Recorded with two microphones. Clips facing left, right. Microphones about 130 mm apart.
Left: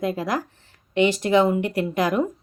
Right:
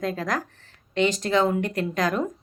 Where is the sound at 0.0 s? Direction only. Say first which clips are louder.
Left 3 dB; 10° left (ahead or behind).